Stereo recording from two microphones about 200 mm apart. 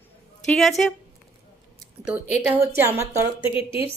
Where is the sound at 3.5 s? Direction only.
25° left (ahead or behind).